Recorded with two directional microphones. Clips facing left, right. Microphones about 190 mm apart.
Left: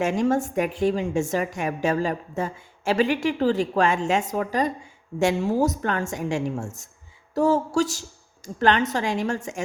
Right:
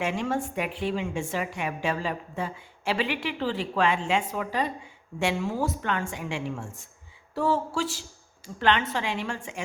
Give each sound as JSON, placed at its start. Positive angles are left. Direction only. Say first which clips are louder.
{"t": 0.0, "sound": "a woman's voice", "louder": "left 6 dB", "side_deg": 45}